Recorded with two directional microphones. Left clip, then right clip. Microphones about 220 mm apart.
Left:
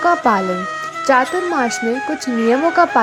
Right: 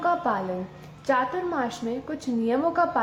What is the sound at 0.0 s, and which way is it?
Speech, 30° left (ahead or behind).